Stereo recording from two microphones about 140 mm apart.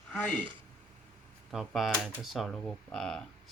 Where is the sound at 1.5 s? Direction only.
Centre (ahead or behind).